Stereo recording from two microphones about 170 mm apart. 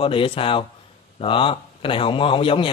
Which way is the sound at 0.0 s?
30° left (ahead or behind).